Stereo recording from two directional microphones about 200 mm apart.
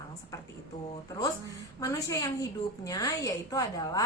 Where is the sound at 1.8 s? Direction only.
15° left (ahead or behind).